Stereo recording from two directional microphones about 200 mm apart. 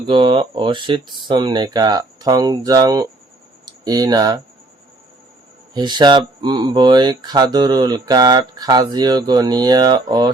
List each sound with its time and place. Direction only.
0.1 s speech: 25° right (ahead or behind)
5.7 s speech: 20° right (ahead or behind)